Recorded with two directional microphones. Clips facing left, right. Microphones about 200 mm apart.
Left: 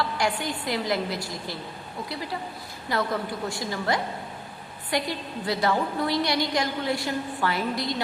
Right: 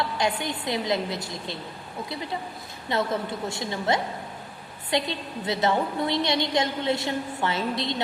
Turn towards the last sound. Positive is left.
turn(degrees=-25)  # may be behind; listen again after turning